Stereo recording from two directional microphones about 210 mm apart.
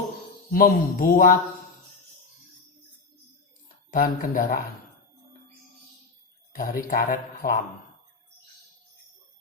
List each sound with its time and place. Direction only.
0.5 s a man's voice: 45° left (ahead or behind)
3.9 s speech: 40° left (ahead or behind)
6.5 s speech: 40° left (ahead or behind)